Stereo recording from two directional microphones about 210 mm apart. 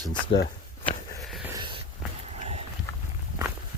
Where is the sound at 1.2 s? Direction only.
Centre (ahead or behind).